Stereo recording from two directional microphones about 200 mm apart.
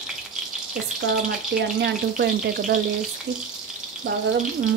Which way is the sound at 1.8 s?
55° right (ahead or behind).